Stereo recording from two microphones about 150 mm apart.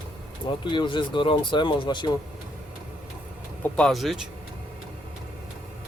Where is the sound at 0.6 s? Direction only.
35° left (ahead or behind).